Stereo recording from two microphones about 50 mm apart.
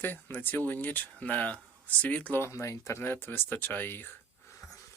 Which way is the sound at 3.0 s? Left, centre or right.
Left.